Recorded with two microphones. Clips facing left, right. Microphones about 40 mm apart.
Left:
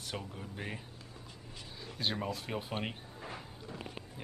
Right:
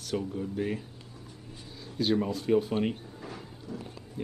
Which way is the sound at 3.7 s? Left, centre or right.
Left.